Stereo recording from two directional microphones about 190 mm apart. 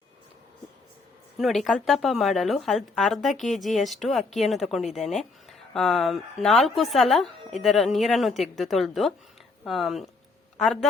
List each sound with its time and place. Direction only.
1.4 s a woman's voice: centre (ahead or behind)